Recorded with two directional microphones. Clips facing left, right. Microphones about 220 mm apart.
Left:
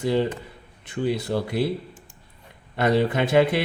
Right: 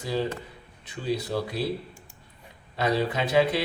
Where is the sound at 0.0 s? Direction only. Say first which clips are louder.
Left 6 dB; 60° left (ahead or behind).